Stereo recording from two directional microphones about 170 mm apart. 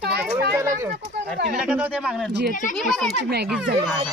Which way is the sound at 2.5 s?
50° left (ahead or behind).